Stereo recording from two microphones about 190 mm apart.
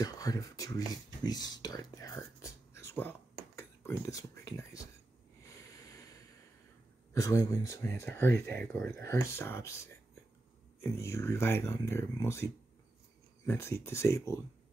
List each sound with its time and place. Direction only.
0.0 s speech: 20° left (ahead or behind)
5.5 s a sound: 20° left (ahead or behind)
7.2 s speech: 15° left (ahead or behind)
10.8 s speech: 15° left (ahead or behind)
13.5 s speech: 10° left (ahead or behind)